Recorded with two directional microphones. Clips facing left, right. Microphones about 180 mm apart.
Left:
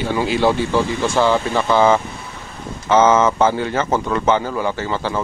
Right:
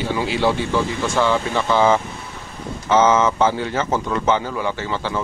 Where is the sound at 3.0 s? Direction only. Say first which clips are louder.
Left 2 dB; 50° left (ahead or behind).